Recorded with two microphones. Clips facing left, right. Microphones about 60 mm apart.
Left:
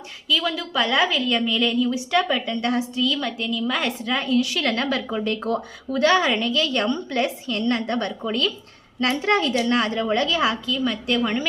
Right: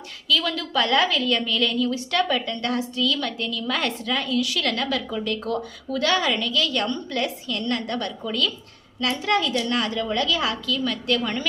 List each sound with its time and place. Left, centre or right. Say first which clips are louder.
0.3 s a woman's voice: even; centre
4.0 s a woman's voice: left 3 dB; left